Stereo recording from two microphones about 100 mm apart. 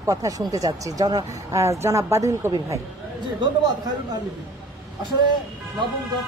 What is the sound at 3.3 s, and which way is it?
Speech, 45° right (ahead or behind).